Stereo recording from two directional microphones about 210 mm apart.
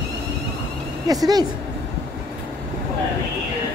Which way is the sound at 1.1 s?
20° right (ahead or behind).